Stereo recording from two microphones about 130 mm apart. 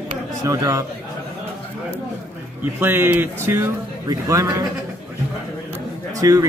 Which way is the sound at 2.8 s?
15° right (ahead or behind).